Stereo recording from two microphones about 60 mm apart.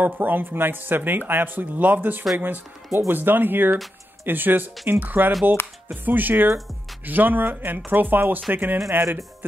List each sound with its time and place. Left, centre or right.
0.0 s speech: right